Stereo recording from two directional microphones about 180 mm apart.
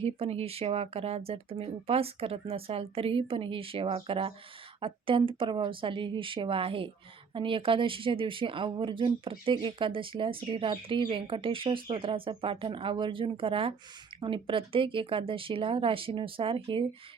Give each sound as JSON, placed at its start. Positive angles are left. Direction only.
{"t": 0.0, "sound": "speech", "side_deg": -35}